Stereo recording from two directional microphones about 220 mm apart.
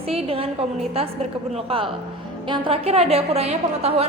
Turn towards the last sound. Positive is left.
turn(degrees=-30)  # may be behind; listen again after turning